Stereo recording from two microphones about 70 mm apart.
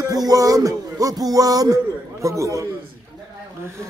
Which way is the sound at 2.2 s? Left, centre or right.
Right.